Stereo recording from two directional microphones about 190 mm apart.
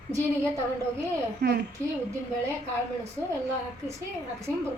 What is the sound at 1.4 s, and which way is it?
Speech, 60° right (ahead or behind).